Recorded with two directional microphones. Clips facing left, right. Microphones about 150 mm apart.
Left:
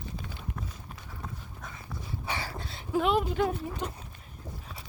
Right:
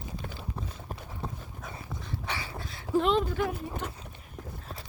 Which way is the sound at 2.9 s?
5° left (ahead or behind).